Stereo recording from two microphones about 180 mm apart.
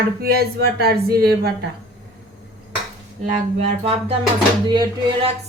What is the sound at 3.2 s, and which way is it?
Music, 40° right (ahead or behind).